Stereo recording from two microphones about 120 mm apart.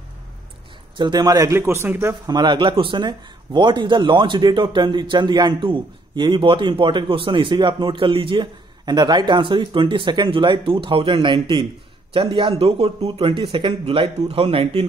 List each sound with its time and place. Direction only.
0.9 s a man's voice: 40° right (ahead or behind); by 2.1 s 20° right (ahead or behind)
2.2 s speech: 35° right (ahead or behind)